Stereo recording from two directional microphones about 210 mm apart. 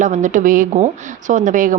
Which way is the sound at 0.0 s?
35° right (ahead or behind).